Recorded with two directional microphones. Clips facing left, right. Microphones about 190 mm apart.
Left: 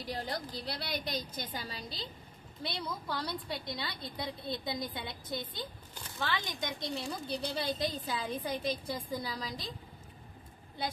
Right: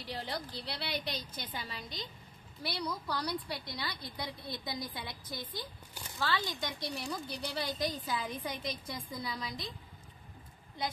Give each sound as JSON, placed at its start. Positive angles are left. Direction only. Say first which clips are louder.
{"t": 0.0, "sound": "a woman's voice", "louder": "left 2 dB", "side_deg": 45}
{"t": 2.6, "sound": "a woman's voice", "louder": "right 1 dB", "side_deg": 20}